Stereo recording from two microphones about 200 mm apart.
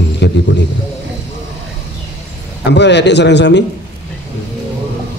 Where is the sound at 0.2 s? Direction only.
60° left (ahead or behind).